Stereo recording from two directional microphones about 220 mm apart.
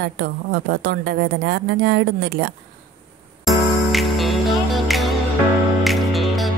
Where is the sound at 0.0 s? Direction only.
50° right (ahead or behind).